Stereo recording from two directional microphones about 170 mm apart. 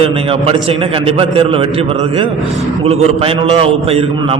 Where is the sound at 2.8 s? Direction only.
35° right (ahead or behind).